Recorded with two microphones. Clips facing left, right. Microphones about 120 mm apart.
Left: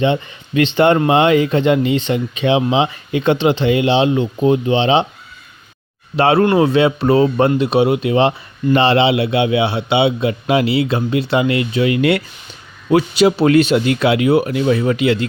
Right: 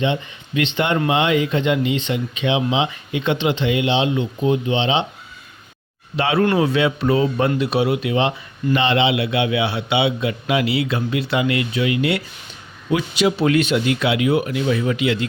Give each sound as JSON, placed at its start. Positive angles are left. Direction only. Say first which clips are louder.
{"t": 0.0, "sound": "speech", "louder": "left 5 dB", "side_deg": 40}
{"t": 6.1, "sound": "a man's voice", "louder": "left 5 dB", "side_deg": 40}
{"t": 11.9, "sound": "speech", "louder": "left 6 dB", "side_deg": 55}
{"t": 12.9, "sound": "speech", "louder": "left 6 dB", "side_deg": 40}